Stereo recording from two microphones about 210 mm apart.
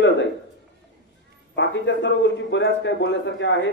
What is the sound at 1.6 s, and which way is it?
A man's voice, 60° left (ahead or behind).